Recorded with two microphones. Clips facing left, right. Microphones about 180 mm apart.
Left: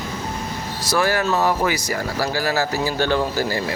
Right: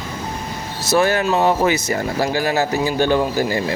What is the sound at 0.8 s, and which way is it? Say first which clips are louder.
Speech: right 3 dB; 25° right (ahead or behind).